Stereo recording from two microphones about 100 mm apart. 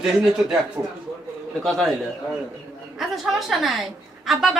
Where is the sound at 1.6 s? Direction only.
5° left (ahead or behind).